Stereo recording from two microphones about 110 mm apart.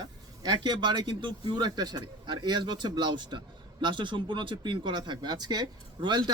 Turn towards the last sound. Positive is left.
turn(degrees=-45)  # may be behind; listen again after turning